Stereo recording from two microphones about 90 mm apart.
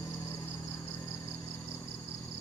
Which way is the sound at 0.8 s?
25° left (ahead or behind).